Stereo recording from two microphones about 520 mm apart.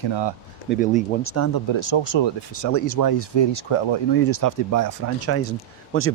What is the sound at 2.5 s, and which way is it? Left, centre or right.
Speech, left.